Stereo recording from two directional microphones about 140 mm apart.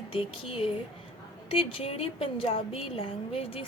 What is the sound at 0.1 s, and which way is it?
A woman's voice, 40° left (ahead or behind).